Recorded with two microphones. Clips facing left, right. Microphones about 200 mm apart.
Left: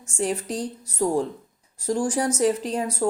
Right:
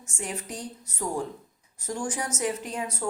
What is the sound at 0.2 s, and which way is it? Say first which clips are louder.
Speech: left 9 dB; 35° left (ahead or behind).